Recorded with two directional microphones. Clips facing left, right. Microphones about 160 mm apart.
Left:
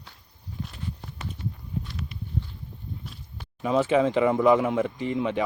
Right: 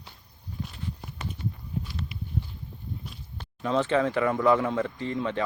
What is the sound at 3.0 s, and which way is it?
Speech, 10° left (ahead or behind).